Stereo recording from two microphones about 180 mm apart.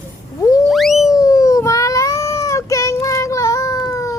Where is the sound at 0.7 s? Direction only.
Centre (ahead or behind).